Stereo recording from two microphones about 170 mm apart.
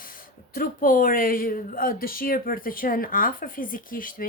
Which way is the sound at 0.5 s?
55° left (ahead or behind).